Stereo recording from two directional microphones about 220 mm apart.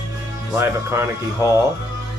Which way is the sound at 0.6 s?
10° right (ahead or behind).